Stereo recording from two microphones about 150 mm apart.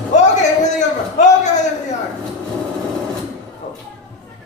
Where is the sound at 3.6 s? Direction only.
50° left (ahead or behind).